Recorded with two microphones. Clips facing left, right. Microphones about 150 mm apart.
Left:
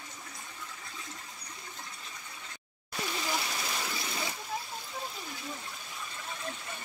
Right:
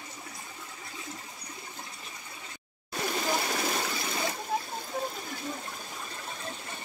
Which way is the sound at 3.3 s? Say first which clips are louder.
Right 5 dB; 50° right (ahead or behind).